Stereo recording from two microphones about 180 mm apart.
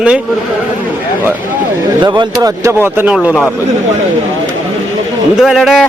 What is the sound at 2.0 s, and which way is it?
Speech, 25° right (ahead or behind).